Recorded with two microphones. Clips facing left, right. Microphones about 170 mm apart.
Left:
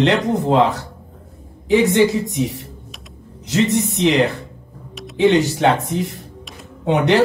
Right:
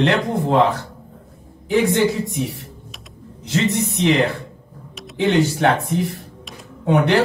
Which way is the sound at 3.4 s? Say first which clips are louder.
Left 3 dB; 20° left (ahead or behind).